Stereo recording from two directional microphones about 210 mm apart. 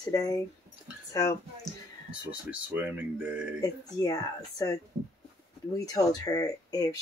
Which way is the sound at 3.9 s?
15° left (ahead or behind).